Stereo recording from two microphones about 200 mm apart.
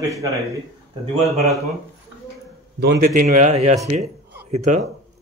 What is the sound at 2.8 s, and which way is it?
Speech, 55° right (ahead or behind).